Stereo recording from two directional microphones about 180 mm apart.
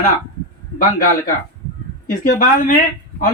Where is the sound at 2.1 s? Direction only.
50° left (ahead or behind).